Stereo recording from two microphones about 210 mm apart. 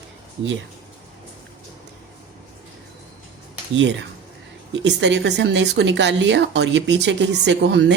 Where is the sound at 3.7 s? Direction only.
60° right (ahead or behind).